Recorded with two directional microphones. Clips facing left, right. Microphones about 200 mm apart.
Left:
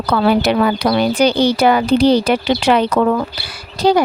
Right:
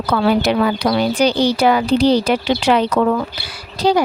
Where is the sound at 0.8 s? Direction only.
50° left (ahead or behind).